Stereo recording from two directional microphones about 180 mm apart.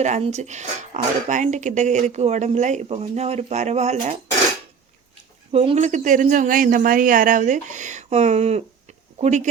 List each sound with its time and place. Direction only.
0.0 s speech: 40° right (ahead or behind)
5.5 s speech: 35° right (ahead or behind)